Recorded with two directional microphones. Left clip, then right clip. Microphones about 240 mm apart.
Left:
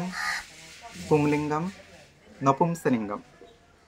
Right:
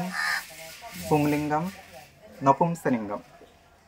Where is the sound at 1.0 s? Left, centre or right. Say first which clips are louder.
Left 1 dB; centre.